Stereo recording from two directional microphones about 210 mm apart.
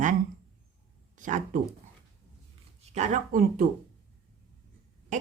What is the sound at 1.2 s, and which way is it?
Speech, 40° right (ahead or behind).